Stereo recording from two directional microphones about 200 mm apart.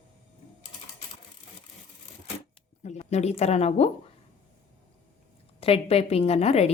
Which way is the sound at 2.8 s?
35° left (ahead or behind).